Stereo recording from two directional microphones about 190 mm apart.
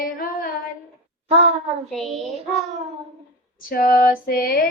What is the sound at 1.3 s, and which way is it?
Speech, 35° right (ahead or behind).